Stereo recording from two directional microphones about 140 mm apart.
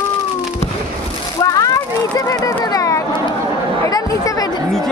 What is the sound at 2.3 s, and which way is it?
Speech, 25° left (ahead or behind).